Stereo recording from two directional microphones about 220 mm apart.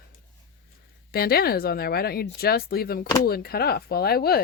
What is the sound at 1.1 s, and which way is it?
Speech, 45° left (ahead or behind).